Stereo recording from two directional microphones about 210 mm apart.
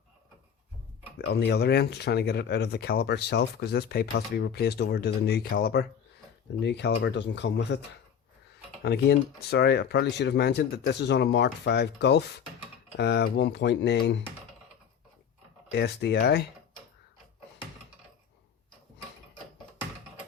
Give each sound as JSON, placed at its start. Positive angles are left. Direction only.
{"t": 1.3, "sound": "speech", "side_deg": 50}
{"t": 8.8, "sound": "speech", "side_deg": 50}
{"t": 15.7, "sound": "speech", "side_deg": 55}